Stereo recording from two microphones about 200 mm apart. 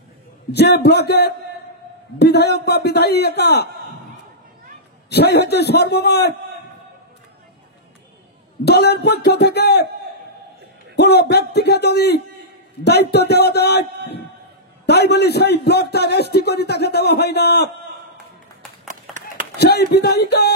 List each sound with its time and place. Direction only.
0.5 s a man's voice: 55° left (ahead or behind)
5.1 s a man's voice: 55° left (ahead or behind)
8.6 s a man's voice: 55° left (ahead or behind)
11.0 s a man's voice: 55° left (ahead or behind)
14.9 s a man's voice: 55° left (ahead or behind)
18.9 s clapping: 40° right (ahead or behind)
19.5 s a man's voice: 55° left (ahead or behind)